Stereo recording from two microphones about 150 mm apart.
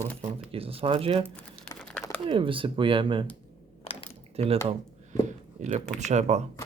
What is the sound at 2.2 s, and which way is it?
Speech, 35° right (ahead or behind).